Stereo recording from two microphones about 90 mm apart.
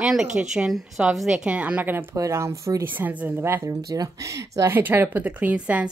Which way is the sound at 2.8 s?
20° right (ahead or behind).